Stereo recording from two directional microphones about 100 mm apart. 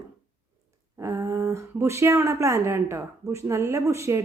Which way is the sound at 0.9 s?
30° right (ahead or behind).